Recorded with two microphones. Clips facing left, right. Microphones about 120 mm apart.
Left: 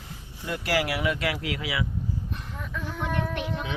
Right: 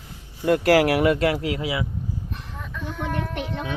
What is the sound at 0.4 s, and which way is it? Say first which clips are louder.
Speech: right 10 dB; 55° right (ahead or behind).